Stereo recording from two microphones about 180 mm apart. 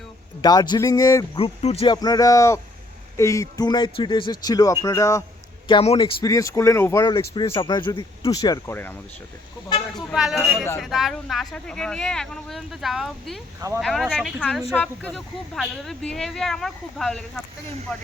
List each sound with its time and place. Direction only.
0.4 s speech: 25° left (ahead or behind)
1.4 s speech: 35° left (ahead or behind); by 5.2 s 15° left (ahead or behind)
5.6 s speech: 30° left (ahead or behind); by 7.0 s 15° left (ahead or behind)
7.0 s speech: 25° left (ahead or behind)
10.1 s speech: centre (ahead or behind)